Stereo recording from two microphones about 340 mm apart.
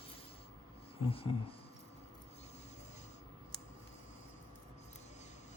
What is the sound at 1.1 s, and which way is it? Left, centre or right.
Speech, centre.